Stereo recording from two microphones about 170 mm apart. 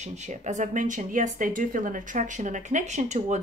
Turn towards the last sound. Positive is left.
turn(degrees=-45)  # may be behind; listen again after turning